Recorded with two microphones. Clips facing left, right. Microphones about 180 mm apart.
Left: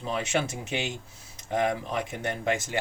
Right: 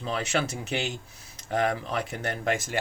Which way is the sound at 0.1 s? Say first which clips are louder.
Even; 20° left (ahead or behind).